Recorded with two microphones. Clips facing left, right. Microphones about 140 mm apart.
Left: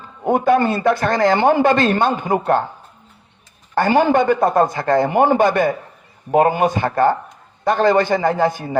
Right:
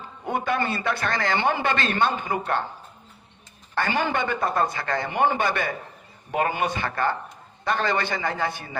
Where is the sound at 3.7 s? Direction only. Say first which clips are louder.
Left 10 dB; 50° left (ahead or behind).